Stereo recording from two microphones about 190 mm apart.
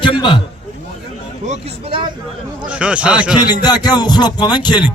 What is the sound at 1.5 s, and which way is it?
Speech, 30° right (ahead or behind).